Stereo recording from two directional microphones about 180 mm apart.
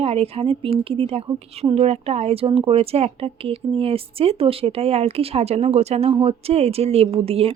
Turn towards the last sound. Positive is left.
turn(degrees=-35)  # may be behind; listen again after turning